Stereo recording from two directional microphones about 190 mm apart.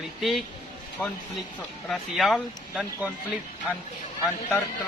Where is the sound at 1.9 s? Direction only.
Centre (ahead or behind).